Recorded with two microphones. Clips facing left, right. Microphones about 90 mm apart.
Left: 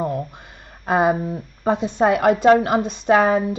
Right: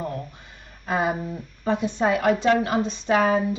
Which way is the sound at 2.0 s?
55° left (ahead or behind).